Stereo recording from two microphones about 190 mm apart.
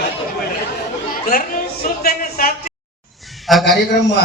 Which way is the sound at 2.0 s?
50° left (ahead or behind).